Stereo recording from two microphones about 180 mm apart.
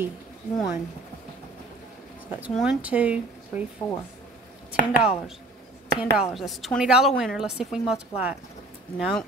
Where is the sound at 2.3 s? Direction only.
10° right (ahead or behind).